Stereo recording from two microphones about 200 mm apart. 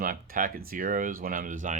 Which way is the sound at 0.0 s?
45° right (ahead or behind).